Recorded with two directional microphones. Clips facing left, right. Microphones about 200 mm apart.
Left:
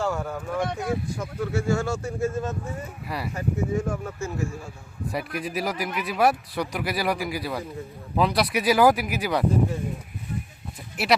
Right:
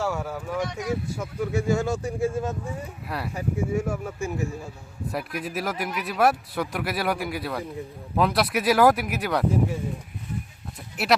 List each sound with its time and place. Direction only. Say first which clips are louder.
0.0 s a sound: left 1 dB; 5° right (ahead or behind)
0.6 s speech: left 2 dB; 55° left (ahead or behind)
1.2 s speech: right 1 dB; 15° right (ahead or behind)
5.1 s speech: left 1 dB; centre (ahead or behind)
11.0 s speech: even; centre (ahead or behind)